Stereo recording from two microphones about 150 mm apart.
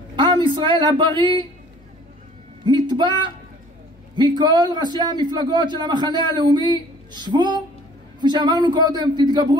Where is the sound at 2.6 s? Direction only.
30° right (ahead or behind).